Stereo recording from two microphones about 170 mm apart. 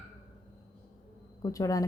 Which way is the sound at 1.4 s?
20° left (ahead or behind).